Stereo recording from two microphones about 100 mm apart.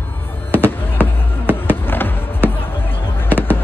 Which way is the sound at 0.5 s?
20° left (ahead or behind).